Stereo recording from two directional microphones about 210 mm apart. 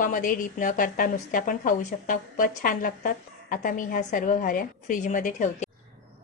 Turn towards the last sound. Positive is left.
turn(degrees=35)  # may be behind; listen again after turning